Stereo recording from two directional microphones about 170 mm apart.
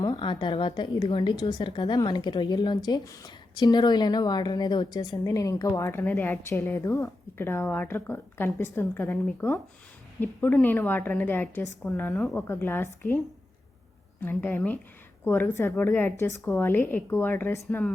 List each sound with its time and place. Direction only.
0.0 s a woman's voice: 25° left (ahead or behind)
14.2 s a woman's voice: 10° left (ahead or behind)